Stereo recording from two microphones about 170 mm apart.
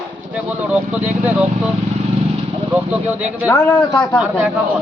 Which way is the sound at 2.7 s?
10° right (ahead or behind).